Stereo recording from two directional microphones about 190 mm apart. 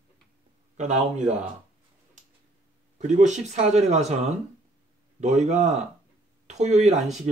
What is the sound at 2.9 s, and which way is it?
Speech, 40° right (ahead or behind).